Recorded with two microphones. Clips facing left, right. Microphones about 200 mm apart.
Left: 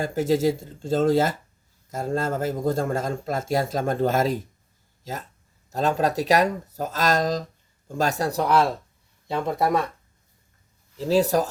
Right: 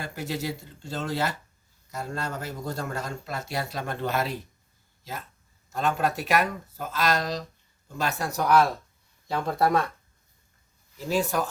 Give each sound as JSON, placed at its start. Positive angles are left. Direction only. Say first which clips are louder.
{"t": 0.0, "sound": "a man's voice", "louder": "left 11 dB", "side_deg": 45}
{"t": 5.7, "sound": "speech", "louder": "left 4 dB", "side_deg": 40}
{"t": 10.9, "sound": "speech", "louder": "left 6 dB", "side_deg": 30}